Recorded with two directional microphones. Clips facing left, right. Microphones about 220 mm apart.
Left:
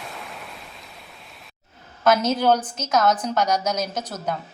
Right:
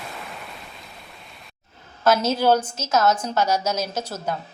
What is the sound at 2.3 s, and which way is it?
A woman's voice, 5° right (ahead or behind).